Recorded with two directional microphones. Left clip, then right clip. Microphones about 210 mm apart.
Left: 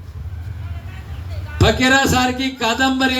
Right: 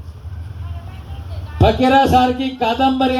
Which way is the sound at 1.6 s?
20° left (ahead or behind).